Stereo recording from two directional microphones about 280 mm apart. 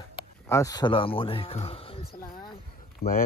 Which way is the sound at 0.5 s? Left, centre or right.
Centre.